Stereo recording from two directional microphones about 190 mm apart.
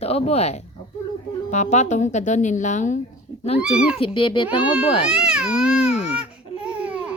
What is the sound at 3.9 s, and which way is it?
Speech, 25° left (ahead or behind).